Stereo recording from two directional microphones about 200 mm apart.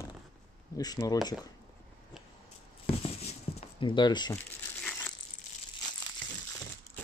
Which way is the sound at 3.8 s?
25° left (ahead or behind).